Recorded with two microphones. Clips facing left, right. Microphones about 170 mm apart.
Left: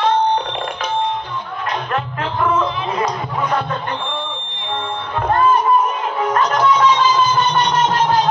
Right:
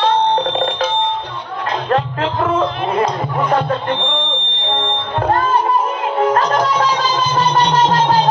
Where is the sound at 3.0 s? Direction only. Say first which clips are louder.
Right 3 dB; 30° right (ahead or behind).